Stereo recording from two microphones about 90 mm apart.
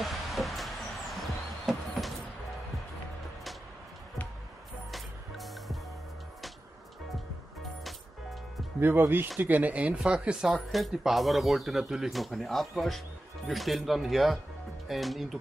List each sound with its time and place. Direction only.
0.0 s a sound: centre (ahead or behind)
4.9 s music: centre (ahead or behind)
8.7 s speech: 25° right (ahead or behind); by 15.3 s centre (ahead or behind)